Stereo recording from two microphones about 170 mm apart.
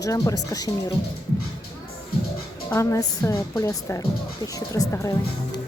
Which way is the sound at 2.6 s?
15° left (ahead or behind).